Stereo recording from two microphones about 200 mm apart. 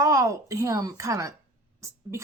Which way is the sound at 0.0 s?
15° right (ahead or behind).